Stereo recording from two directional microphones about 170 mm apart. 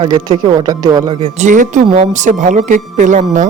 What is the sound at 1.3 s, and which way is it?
Speech, 45° right (ahead or behind).